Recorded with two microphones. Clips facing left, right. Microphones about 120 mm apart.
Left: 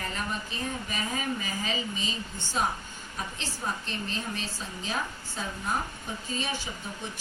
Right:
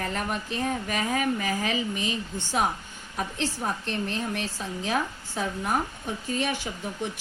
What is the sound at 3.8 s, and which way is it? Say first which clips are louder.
Speech: right 5 dB; 70° right (ahead or behind).